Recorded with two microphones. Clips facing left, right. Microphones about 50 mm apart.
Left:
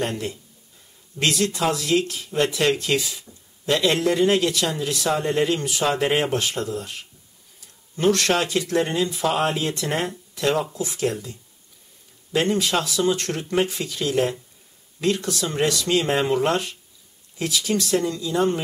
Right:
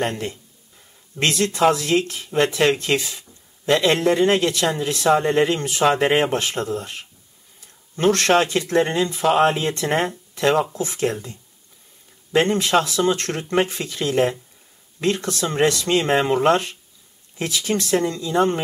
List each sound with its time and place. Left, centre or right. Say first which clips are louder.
0.0 s speech: right 2 dB; right